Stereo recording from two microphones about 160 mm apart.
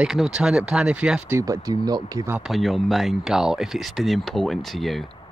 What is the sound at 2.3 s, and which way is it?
Speech, centre (ahead or behind).